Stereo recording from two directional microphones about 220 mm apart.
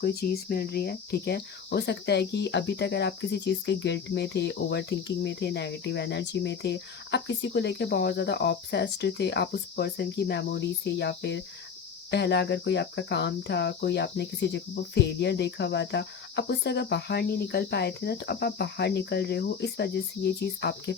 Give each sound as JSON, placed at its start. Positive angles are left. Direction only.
{"t": 0.0, "sound": "speech", "side_deg": 45}